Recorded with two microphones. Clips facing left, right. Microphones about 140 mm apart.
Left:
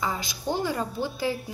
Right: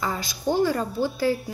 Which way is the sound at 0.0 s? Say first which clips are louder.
Right 1 dB; 20° left (ahead or behind).